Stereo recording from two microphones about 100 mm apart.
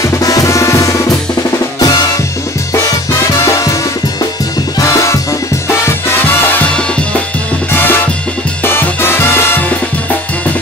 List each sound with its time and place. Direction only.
0.0 s music: 35° left (ahead or behind)
1.8 s drum kit: 40° left (ahead or behind)
3.3 s music: 30° left (ahead or behind)
4.7 s music: 30° left (ahead or behind)
7.7 s drum kit: 20° left (ahead or behind)
8.6 s music: 20° left (ahead or behind)